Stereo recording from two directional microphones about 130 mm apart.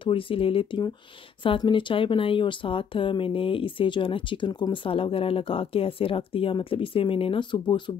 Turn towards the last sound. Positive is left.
turn(degrees=35)  # may be behind; listen again after turning